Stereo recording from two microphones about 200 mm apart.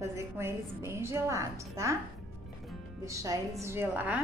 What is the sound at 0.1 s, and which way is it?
A woman's voice, 15° right (ahead or behind).